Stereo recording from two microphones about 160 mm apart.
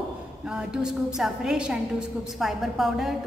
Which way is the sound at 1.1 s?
5° right (ahead or behind).